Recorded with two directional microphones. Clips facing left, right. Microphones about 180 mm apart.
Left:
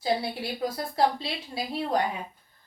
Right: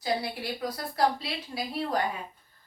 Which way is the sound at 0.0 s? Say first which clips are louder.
Left 2 dB; 25° left (ahead or behind).